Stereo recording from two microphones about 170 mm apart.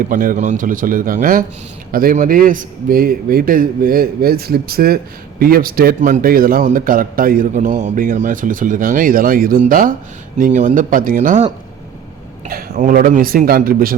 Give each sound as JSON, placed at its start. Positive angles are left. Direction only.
{"t": 0.1, "sound": "a man's voice", "side_deg": -55}
{"t": 12.7, "sound": "a man's voice", "side_deg": -50}